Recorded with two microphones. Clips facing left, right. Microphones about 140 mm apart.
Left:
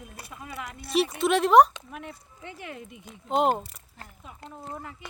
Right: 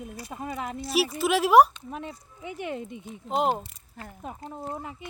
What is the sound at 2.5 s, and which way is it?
Speech, 25° right (ahead or behind).